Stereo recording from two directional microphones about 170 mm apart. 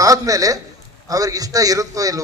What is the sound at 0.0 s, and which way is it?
A man's voice, 20° right (ahead or behind).